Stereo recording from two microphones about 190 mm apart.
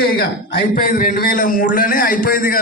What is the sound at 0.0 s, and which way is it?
A man's voice, 50° left (ahead or behind).